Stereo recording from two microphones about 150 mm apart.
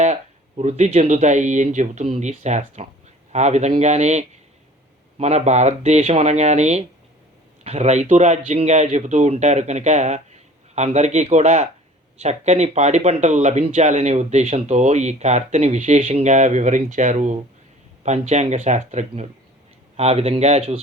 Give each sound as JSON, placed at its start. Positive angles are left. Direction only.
{"t": 0.0, "sound": "speech", "side_deg": -50}